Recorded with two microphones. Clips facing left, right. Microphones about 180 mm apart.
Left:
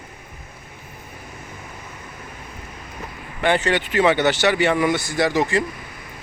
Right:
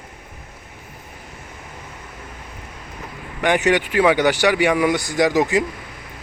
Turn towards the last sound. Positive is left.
turn(degrees=-15)  # may be behind; listen again after turning